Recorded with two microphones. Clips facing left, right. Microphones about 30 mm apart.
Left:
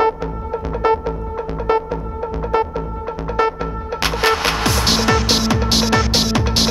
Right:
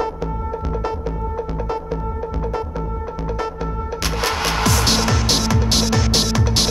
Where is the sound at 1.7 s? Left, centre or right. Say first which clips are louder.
Left 11 dB; left.